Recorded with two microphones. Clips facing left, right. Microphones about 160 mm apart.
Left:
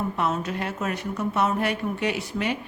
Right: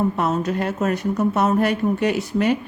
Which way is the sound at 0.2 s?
40° right (ahead or behind).